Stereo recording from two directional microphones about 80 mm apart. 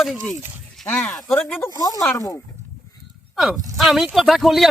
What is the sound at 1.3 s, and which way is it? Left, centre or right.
Speech, left.